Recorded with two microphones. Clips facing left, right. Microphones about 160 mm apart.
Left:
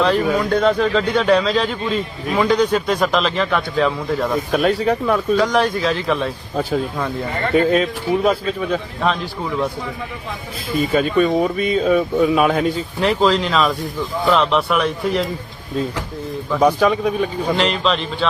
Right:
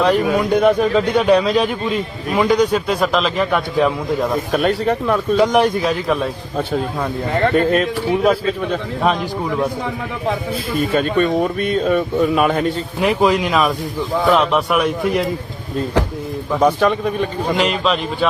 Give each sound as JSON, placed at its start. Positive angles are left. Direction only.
{"t": 0.0, "sound": "speech", "side_deg": -5}
{"t": 0.5, "sound": "a man's voice", "side_deg": -15}
{"t": 4.3, "sound": "speech", "side_deg": 0}
{"t": 5.4, "sound": "a man's voice", "side_deg": -20}
{"t": 9.8, "sound": "speech", "side_deg": -90}
{"t": 10.8, "sound": "speech", "side_deg": 0}
{"t": 13.0, "sound": "a man's voice", "side_deg": -10}
{"t": 16.6, "sound": "speech", "side_deg": 0}
{"t": 17.6, "sound": "a man's voice", "side_deg": -10}